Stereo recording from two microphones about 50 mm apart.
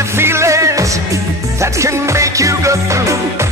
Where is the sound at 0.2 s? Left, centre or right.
Right.